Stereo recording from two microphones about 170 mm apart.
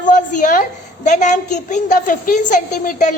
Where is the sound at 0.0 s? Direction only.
50° left (ahead or behind).